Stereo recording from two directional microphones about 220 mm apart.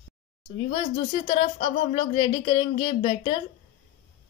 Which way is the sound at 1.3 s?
25° left (ahead or behind).